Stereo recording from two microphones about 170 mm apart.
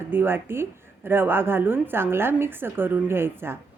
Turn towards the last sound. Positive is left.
turn(degrees=-15)  # may be behind; listen again after turning